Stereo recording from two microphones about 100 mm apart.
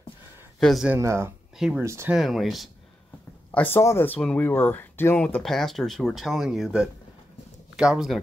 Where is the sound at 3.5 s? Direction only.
20° left (ahead or behind).